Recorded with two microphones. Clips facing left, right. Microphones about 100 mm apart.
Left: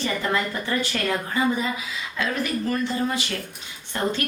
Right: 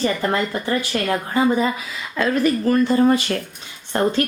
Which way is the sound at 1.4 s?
45° right (ahead or behind).